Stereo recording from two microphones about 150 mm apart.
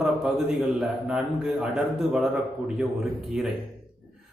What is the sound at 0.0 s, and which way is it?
A man's voice, centre (ahead or behind).